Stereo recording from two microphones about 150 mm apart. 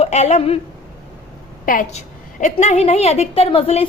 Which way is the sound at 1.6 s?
65° left (ahead or behind).